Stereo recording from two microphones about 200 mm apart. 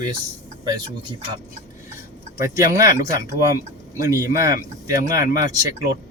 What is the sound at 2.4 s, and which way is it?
Speech, 15° right (ahead or behind).